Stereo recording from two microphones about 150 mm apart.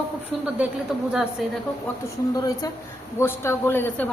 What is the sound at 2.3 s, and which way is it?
A woman's voice, 25° left (ahead or behind).